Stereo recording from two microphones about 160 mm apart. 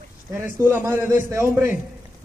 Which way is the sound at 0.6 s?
15° right (ahead or behind).